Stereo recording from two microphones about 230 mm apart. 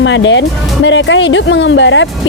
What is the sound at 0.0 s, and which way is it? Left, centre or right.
Speech, left.